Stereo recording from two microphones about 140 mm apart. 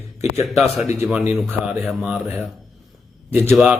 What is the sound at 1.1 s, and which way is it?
Speech, 5° right (ahead or behind).